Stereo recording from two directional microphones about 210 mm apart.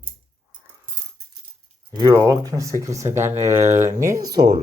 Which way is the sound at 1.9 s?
15° right (ahead or behind).